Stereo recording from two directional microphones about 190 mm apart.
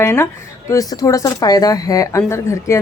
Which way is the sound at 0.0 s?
15° left (ahead or behind).